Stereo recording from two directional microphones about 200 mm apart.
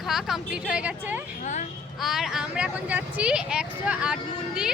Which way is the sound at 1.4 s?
35° left (ahead or behind).